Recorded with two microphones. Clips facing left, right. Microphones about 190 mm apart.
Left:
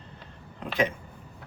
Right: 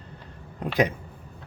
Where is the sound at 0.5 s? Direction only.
40° right (ahead or behind).